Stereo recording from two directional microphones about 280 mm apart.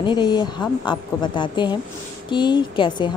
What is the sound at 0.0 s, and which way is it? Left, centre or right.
A woman's voice, centre.